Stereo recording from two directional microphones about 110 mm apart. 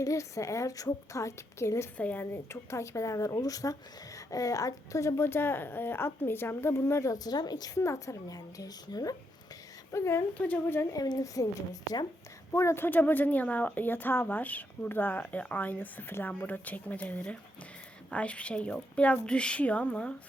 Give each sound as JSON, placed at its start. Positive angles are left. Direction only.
{"t": 0.0, "sound": "a woman's voice", "side_deg": 30}
{"t": 10.3, "sound": "speech", "side_deg": 15}
{"t": 10.9, "sound": "a woman's voice", "side_deg": 35}